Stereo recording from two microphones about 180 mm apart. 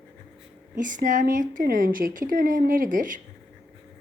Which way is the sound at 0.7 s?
45° right (ahead or behind).